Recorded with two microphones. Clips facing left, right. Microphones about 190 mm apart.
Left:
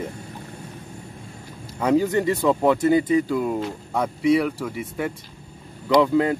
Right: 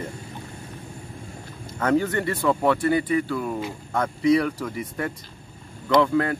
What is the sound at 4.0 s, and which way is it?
Speech, 5° left (ahead or behind).